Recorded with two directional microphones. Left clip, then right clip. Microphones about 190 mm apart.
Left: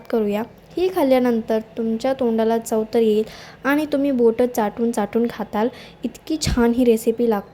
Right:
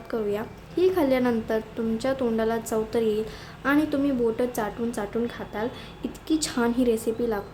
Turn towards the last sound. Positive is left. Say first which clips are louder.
# left 7 dB
turn(degrees=35)  # may be behind; listen again after turning